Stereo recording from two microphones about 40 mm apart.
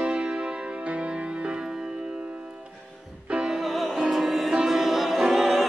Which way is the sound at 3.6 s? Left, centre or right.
Centre.